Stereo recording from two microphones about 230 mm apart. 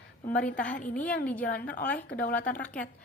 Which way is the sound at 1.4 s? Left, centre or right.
Left.